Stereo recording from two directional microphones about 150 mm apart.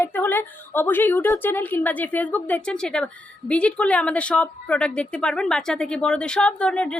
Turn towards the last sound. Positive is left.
turn(degrees=5)  # may be behind; listen again after turning